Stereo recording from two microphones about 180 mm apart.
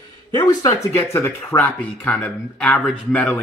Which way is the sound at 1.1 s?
15° left (ahead or behind).